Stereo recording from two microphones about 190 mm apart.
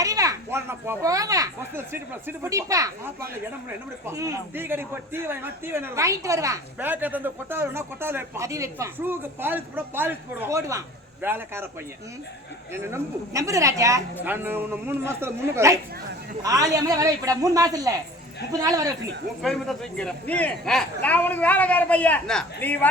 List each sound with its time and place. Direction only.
0.0 s a man's voice: 20° right (ahead or behind)
12.7 s a man's voice: 15° right (ahead or behind)
19.4 s speech: centre (ahead or behind)